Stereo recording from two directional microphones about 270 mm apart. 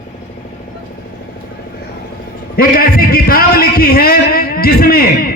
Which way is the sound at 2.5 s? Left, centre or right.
Left.